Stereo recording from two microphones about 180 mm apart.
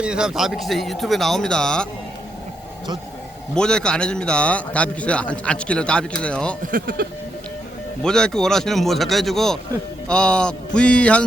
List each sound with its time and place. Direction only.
0.0 s a man's voice: 5° right (ahead or behind)
3.5 s a man's voice: 5° left (ahead or behind)
6.7 s speech: 50° right (ahead or behind)
8.0 s a man's voice: 5° left (ahead or behind)